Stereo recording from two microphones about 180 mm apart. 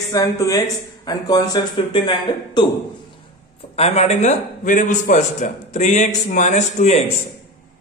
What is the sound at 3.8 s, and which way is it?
A man's voice, 40° left (ahead or behind).